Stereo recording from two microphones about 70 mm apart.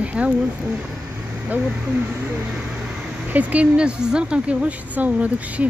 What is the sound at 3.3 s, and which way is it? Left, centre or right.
Speech, right.